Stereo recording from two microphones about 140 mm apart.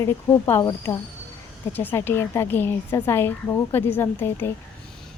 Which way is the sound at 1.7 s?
15° left (ahead or behind).